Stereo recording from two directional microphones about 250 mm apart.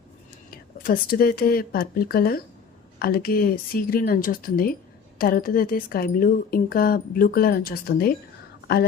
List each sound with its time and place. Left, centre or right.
0.5 s a woman's voice: left